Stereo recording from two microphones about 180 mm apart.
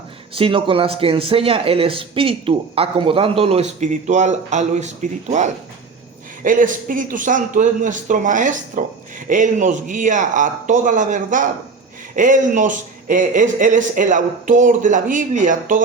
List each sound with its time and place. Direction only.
0.3 s a man's voice: 30° right (ahead or behind)
6.4 s a man's voice: 50° right (ahead or behind)